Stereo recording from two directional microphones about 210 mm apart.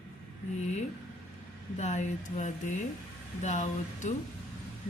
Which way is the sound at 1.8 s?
35° left (ahead or behind).